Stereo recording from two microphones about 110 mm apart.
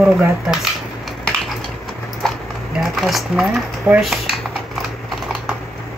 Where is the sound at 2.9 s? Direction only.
Centre (ahead or behind).